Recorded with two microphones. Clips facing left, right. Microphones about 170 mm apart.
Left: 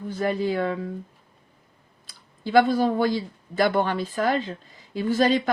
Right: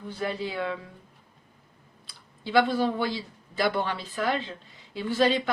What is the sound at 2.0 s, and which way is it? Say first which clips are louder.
Speech: left 5 dB; 45° left (ahead or behind).